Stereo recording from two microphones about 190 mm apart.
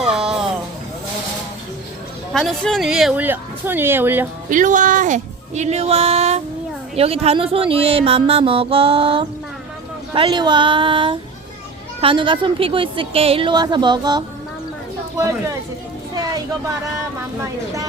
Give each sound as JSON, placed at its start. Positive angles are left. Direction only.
{"t": 0.0, "sound": "a sound", "side_deg": -5}
{"t": 2.3, "sound": "speech", "side_deg": 0}
{"t": 4.4, "sound": "a woman's voice", "side_deg": -45}